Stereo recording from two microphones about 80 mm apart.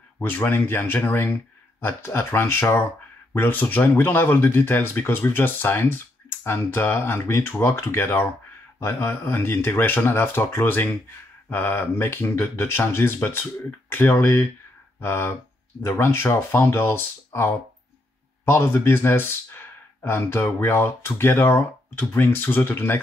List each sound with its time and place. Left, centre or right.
0.2 s speech: left